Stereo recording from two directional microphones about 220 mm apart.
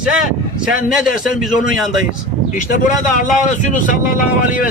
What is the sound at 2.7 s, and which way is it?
Speech, 35° left (ahead or behind).